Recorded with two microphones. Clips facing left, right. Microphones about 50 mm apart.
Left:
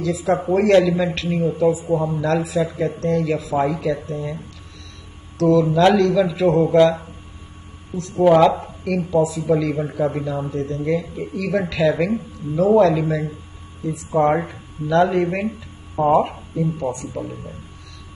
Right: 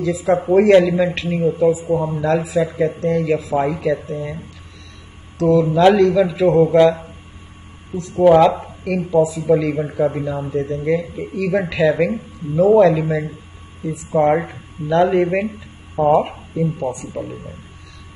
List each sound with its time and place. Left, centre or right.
0.0 s speech: centre
5.4 s speech: centre
8.2 s speech: centre
8.5 s speech: centre
13.0 s speech: right